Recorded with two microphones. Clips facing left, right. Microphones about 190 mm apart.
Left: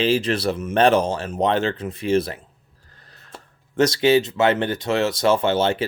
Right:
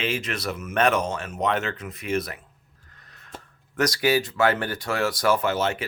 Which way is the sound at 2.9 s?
30° left (ahead or behind).